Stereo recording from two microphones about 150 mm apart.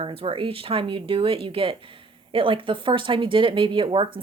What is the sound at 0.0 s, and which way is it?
Speech, 35° right (ahead or behind).